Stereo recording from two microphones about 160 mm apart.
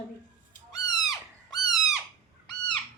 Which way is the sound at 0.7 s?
25° left (ahead or behind).